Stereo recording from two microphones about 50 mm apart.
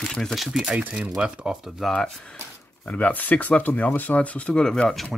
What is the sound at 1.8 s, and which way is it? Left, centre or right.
Speech, centre.